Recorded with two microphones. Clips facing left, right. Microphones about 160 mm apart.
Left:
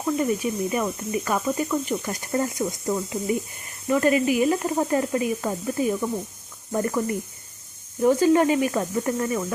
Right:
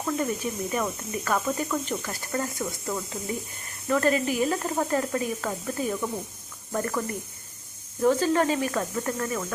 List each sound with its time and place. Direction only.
0.0 s speech: 10° left (ahead or behind)
2.0 s speech: 20° left (ahead or behind)
8.0 s speech: 15° left (ahead or behind)